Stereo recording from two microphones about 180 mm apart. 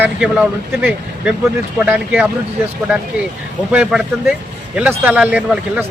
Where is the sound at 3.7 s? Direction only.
5° right (ahead or behind).